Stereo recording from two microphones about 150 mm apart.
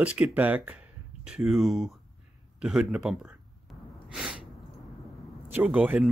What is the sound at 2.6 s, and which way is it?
Gasp, 5° right (ahead or behind).